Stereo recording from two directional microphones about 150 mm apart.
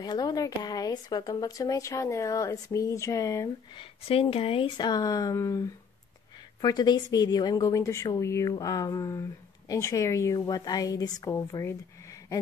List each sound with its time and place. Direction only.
0.0 s speech: 25° left (ahead or behind)
3.7 s speech: 40° left (ahead or behind); by 12.4 s 20° left (ahead or behind)